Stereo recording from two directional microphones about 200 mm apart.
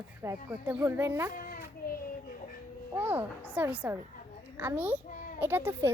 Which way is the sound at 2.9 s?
10° right (ahead or behind).